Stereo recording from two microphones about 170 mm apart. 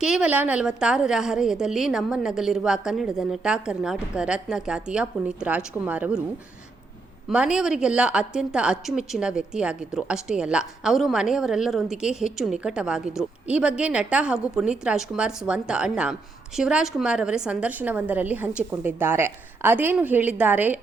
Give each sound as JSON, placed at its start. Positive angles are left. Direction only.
{"t": 0.0, "sound": "a woman's voice", "side_deg": -5}
{"t": 7.3, "sound": "a woman's voice", "side_deg": -5}